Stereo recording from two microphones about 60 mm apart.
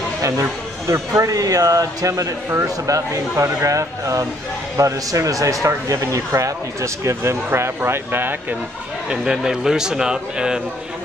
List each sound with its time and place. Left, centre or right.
0.2 s speech: right
2.9 s speech: right
7.4 s speech: right
9.1 s a man's voice: centre